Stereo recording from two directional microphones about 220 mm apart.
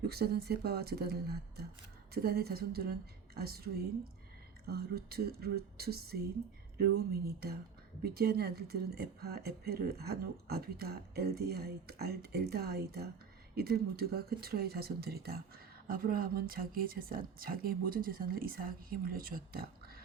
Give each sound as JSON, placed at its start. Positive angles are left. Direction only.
{"t": 0.0, "sound": "speech", "side_deg": -45}